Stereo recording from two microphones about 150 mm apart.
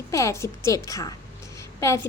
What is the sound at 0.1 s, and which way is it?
Speech, 20° left (ahead or behind).